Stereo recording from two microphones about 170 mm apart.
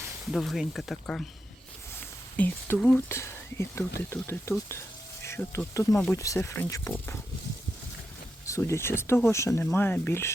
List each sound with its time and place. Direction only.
0.3 s speech: centre (ahead or behind); by 7.2 s 15° left (ahead or behind)
8.4 s speech: 15° left (ahead or behind)